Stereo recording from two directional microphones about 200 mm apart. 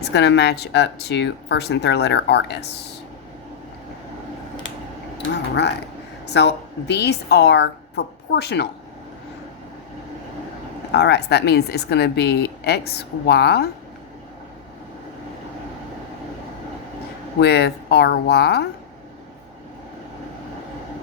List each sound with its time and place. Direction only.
0.0 s speech: 60° left (ahead or behind)
5.1 s a sound: 60° left (ahead or behind)
6.2 s speech: 55° left (ahead or behind)
10.9 s speech: 55° left (ahead or behind)
17.4 s speech: 55° left (ahead or behind)